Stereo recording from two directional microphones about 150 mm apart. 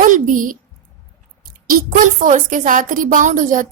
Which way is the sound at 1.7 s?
65° right (ahead or behind).